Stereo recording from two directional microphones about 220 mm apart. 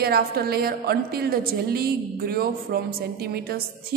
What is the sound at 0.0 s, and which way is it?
A woman's voice, 45° right (ahead or behind).